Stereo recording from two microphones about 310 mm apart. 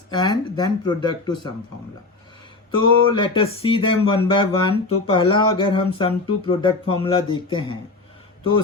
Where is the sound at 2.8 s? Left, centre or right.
Centre.